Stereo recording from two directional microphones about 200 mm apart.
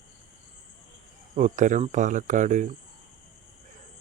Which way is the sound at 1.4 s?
40° right (ahead or behind).